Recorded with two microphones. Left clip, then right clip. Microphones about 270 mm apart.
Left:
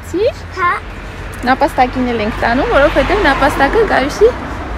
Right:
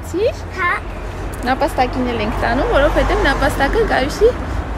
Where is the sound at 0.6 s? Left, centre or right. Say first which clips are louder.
Left 4 dB; centre.